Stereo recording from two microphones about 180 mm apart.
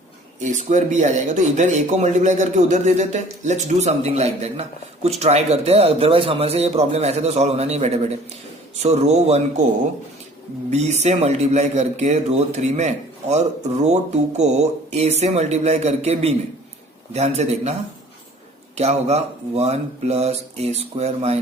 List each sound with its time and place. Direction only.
0.3 s speech: 45° right (ahead or behind)
10.7 s speech: 40° right (ahead or behind)
18.8 s speech: 35° right (ahead or behind)